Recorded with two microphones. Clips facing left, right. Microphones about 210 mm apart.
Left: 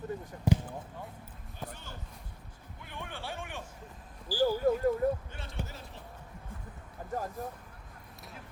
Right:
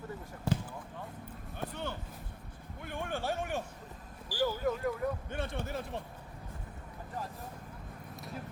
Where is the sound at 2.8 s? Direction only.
45° right (ahead or behind).